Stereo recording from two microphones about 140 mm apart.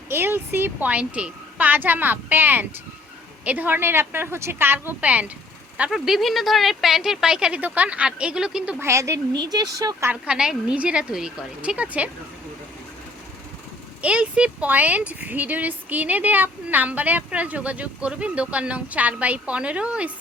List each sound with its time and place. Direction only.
0.1 s speech: 15° right (ahead or behind)
8.8 s speech: 20° right (ahead or behind)
10.1 s speech: 5° right (ahead or behind)
14.0 s speech: 10° right (ahead or behind)